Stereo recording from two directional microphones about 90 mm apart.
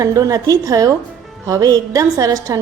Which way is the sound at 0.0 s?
40° right (ahead or behind).